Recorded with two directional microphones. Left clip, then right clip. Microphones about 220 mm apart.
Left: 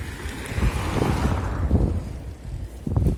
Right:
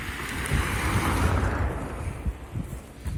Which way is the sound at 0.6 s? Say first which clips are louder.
Left 3 dB; 30° right (ahead or behind).